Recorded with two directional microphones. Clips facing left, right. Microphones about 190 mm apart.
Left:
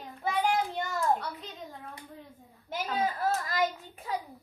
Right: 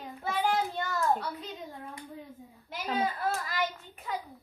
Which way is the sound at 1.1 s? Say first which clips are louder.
Right 1 dB; centre (ahead or behind).